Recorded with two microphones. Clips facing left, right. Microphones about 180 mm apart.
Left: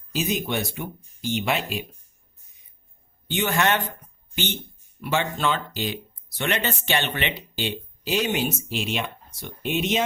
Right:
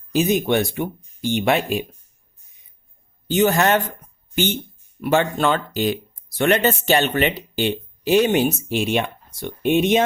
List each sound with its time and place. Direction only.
0.1 s speech: 55° right (ahead or behind)
3.2 s a man's voice: 40° right (ahead or behind)
4.9 s speech: 50° right (ahead or behind)